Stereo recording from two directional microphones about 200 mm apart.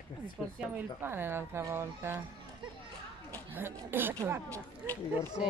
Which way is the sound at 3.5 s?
10° right (ahead or behind).